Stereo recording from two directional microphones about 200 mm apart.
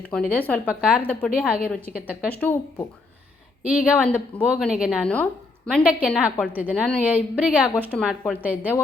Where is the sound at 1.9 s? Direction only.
45° left (ahead or behind).